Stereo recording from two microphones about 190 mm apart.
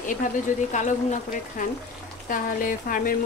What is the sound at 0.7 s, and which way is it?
Speech, 40° left (ahead or behind).